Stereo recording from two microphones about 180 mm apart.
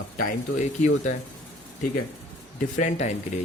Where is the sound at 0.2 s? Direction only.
45° left (ahead or behind).